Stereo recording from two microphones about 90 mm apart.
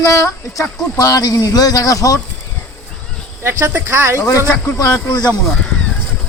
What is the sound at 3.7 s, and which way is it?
Speech, 30° right (ahead or behind).